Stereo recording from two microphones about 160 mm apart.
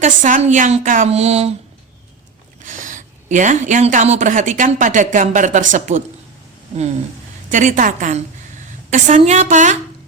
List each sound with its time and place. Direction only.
0.0 s speech: 55° right (ahead or behind)
2.6 s a woman's voice: 55° right (ahead or behind)
7.5 s speech: 50° right (ahead or behind)